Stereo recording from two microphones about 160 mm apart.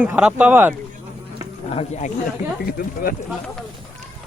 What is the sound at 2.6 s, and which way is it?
Speech, 65° left (ahead or behind).